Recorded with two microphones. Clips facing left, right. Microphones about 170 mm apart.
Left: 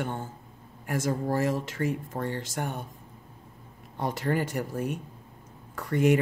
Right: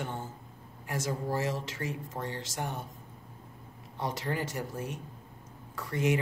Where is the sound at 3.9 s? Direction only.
55° left (ahead or behind).